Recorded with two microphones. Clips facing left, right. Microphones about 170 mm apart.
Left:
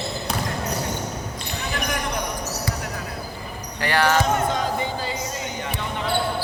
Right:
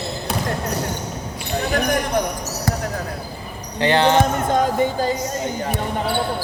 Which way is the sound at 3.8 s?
25° right (ahead or behind).